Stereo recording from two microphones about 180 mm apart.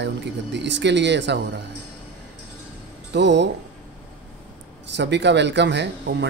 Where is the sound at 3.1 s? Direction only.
75° right (ahead or behind).